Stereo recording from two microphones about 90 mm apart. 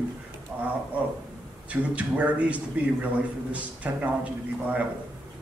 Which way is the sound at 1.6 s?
15° right (ahead or behind).